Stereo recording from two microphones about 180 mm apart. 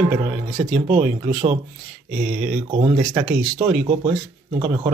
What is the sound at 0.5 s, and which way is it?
Speech, 55° right (ahead or behind).